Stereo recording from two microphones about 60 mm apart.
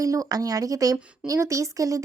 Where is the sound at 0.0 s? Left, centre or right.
Right.